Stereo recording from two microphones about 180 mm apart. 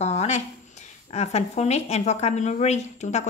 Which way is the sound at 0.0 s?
40° left (ahead or behind).